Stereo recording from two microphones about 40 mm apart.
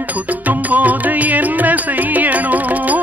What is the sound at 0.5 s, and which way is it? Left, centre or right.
Music, right.